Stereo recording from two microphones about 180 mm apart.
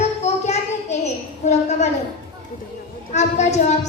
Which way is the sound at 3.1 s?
40° left (ahead or behind).